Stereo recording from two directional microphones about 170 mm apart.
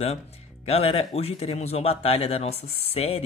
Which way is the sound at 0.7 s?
35° left (ahead or behind).